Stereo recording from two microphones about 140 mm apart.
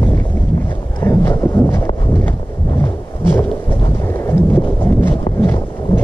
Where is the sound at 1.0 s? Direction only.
20° left (ahead or behind).